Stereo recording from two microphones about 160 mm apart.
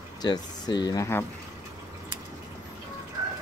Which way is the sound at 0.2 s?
25° left (ahead or behind).